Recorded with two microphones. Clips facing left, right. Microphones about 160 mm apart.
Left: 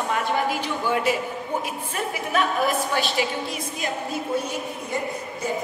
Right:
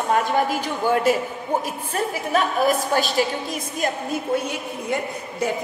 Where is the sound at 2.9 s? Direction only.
45° right (ahead or behind).